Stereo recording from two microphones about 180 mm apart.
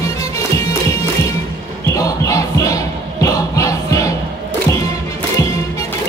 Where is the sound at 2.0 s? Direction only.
20° left (ahead or behind).